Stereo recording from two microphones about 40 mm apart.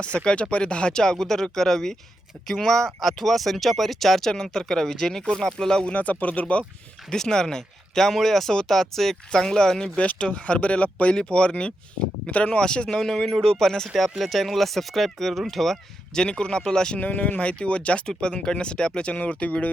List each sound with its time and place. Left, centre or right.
0.5 s speech: left
5.9 s speech: left
7.1 s speech: centre
10.0 s speech: left
12.6 s speech: left
13.0 s speech: centre
13.9 s speech: centre
16.1 s speech: centre
17.0 s speech: left
19.1 s speech: left